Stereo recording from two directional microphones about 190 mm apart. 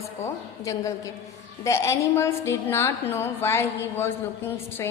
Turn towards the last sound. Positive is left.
turn(degrees=10)  # may be behind; listen again after turning